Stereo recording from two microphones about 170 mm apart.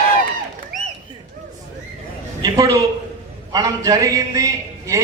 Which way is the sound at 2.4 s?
20° right (ahead or behind).